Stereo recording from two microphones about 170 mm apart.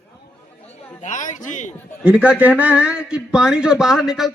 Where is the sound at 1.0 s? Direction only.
45° left (ahead or behind).